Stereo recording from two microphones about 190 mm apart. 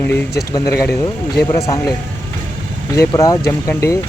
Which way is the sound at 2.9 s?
15° left (ahead or behind).